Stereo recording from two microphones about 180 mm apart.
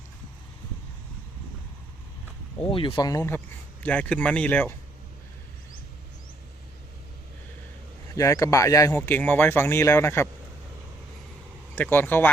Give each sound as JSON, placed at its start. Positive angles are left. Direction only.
{"t": 2.6, "sound": "speech", "side_deg": 30}
{"t": 8.1, "sound": "speech", "side_deg": 20}
{"t": 11.7, "sound": "speech", "side_deg": 10}